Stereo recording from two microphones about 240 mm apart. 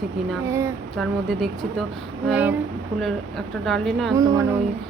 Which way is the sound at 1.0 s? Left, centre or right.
Centre.